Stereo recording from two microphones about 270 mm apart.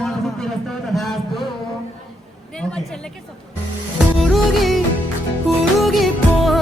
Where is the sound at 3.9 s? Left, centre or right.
Centre.